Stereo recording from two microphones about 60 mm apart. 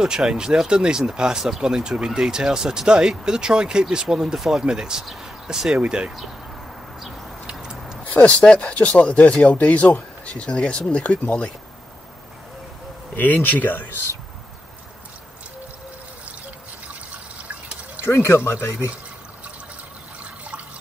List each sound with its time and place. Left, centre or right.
0.0 s speech: centre
7.4 s tick-tock: centre
8.0 s speech: left
13.1 s speech: left
17.4 s drip: right
18.0 s speech: left